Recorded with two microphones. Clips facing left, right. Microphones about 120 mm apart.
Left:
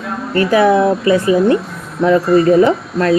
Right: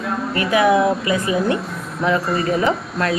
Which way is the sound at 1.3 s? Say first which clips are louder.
Left 7 dB; centre (ahead or behind).